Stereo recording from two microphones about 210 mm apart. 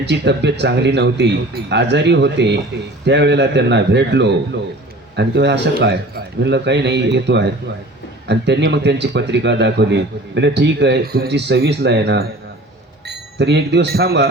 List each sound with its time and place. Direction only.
0.0 s a man's voice: 55° right (ahead or behind)